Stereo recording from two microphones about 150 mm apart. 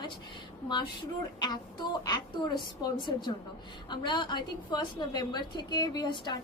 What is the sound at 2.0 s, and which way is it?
A woman's voice, 25° left (ahead or behind).